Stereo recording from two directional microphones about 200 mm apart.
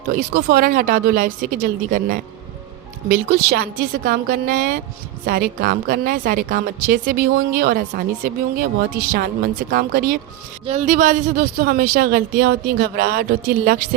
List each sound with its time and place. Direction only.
0.1 s a woman's voice: 50° right (ahead or behind)